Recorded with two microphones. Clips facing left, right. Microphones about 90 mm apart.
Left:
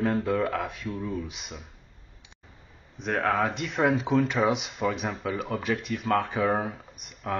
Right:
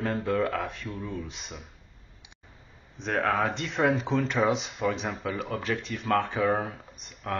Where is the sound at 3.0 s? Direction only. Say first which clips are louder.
Left 1 dB; centre (ahead or behind).